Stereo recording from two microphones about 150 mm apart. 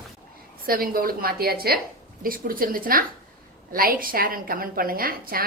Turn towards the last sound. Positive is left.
turn(degrees=-75)  # may be behind; listen again after turning